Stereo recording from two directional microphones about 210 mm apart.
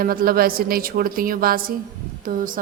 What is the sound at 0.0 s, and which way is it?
Speech, 45° right (ahead or behind).